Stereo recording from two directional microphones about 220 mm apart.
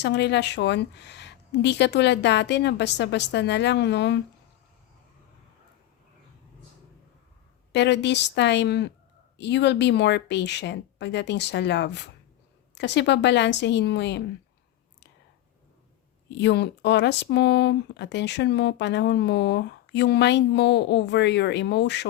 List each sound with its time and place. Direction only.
0.0 s speech: 50° left (ahead or behind)
7.7 s speech: 50° left (ahead or behind)
16.4 s speech: 50° left (ahead or behind)